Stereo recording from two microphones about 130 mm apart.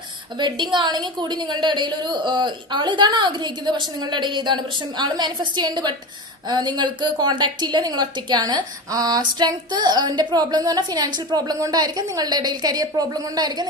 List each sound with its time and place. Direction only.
0.3 s a woman's voice: 35° right (ahead or behind)